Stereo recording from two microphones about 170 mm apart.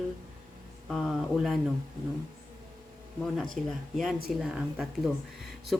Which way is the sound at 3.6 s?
45° right (ahead or behind).